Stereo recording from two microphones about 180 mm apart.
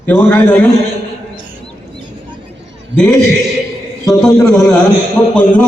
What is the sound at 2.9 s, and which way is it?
Speech, 75° right (ahead or behind).